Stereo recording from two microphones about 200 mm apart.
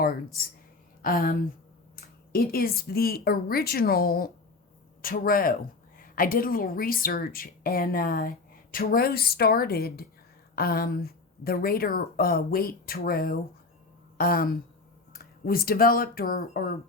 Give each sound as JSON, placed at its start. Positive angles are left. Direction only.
{"t": 0.0, "sound": "speech", "side_deg": 45}